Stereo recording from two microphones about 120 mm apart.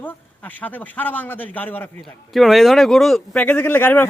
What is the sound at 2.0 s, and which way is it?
Speech, centre (ahead or behind).